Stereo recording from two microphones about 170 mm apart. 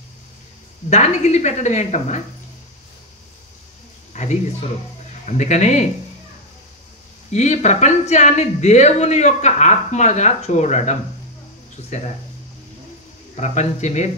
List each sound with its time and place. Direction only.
0.8 s speech: 40° left (ahead or behind)
4.1 s a sound: 45° left (ahead or behind)
5.2 s speech: 45° left (ahead or behind)
7.3 s speech: 40° left (ahead or behind)
13.4 s speech: 45° left (ahead or behind)